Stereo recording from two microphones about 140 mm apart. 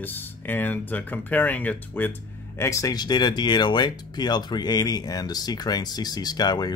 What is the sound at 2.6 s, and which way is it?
Speech, 25° left (ahead or behind).